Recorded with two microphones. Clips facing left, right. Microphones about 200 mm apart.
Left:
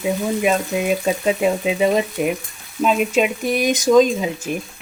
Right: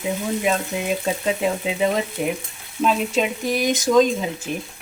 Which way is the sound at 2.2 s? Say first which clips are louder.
Left 3 dB; 15° left (ahead or behind).